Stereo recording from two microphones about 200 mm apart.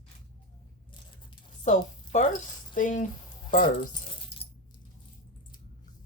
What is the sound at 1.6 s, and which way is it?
A woman's voice, 40° left (ahead or behind).